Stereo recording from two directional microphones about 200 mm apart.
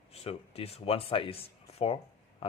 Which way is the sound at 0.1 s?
30° left (ahead or behind).